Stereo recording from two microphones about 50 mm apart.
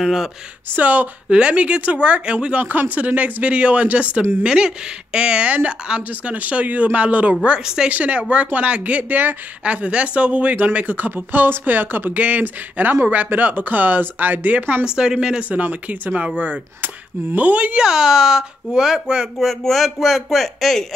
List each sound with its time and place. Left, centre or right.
0.0 s speech: centre
0.7 s speech: right
7.6 s speech: centre
7.9 s speech: right
10.9 s speech: right
12.2 s speech: right
14.9 s speech: centre
15.5 s speech: right
17.4 s speech: right
17.7 s speech: centre
19.1 s speech: centre
19.4 s speech: centre